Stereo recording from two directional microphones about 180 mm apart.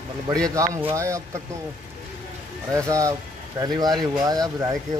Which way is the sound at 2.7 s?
15° right (ahead or behind).